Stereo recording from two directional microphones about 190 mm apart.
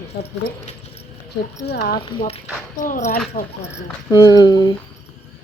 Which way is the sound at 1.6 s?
60° left (ahead or behind).